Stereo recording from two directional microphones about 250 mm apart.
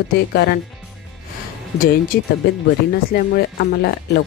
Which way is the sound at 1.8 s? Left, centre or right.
Left.